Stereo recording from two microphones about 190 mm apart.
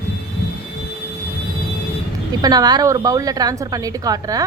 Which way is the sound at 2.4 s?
20° right (ahead or behind).